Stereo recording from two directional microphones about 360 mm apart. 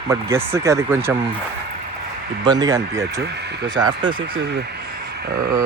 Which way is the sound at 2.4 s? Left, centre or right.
Centre.